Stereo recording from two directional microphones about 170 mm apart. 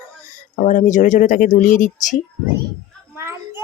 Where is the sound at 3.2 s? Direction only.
15° right (ahead or behind).